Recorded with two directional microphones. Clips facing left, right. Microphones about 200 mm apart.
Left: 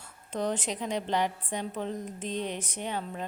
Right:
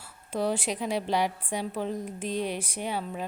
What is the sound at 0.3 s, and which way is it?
A woman's voice, 10° right (ahead or behind).